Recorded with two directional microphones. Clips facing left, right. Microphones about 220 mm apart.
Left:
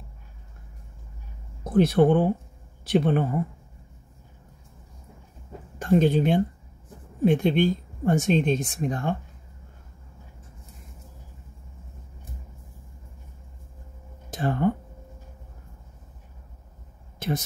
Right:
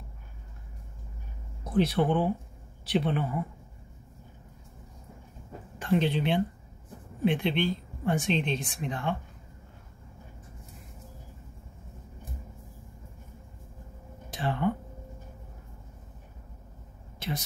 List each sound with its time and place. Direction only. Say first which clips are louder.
1.6 s speech: left 6 dB; 45° left (ahead or behind)
5.8 s speech: left 6 dB; 45° left (ahead or behind)
14.3 s speech: left 5 dB; 45° left (ahead or behind)